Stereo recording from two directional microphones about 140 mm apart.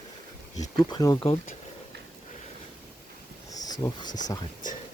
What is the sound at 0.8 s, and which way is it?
Speech, 30° left (ahead or behind).